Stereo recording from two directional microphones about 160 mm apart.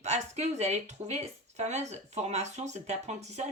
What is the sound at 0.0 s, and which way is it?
Speech, 45° right (ahead or behind).